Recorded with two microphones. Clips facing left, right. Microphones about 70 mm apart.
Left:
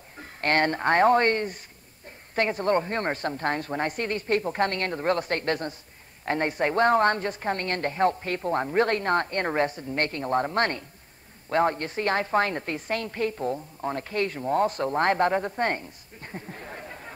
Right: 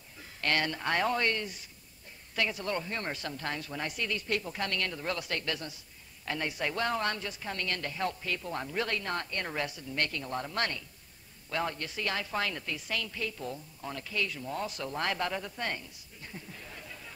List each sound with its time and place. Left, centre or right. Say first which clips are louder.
0.2 s a woman's voice: left 7 dB; left